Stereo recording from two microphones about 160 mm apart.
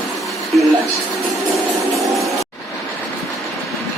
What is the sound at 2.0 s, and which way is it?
Music, centre (ahead or behind).